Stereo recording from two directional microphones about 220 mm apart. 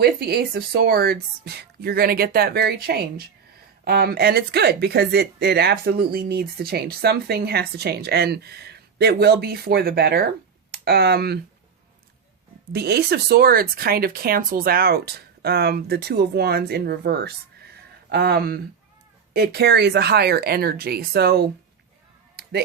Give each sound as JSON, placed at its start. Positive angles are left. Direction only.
{"t": 0.0, "sound": "speech", "side_deg": -45}
{"t": 12.7, "sound": "speech", "side_deg": -45}
{"t": 22.4, "sound": "a sound", "side_deg": -45}